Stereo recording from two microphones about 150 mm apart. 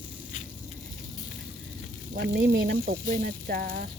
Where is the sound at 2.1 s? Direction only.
90° right; by 3.9 s 75° right (ahead or behind).